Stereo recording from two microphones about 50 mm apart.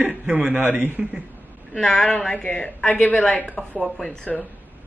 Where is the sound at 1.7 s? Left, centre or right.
Centre.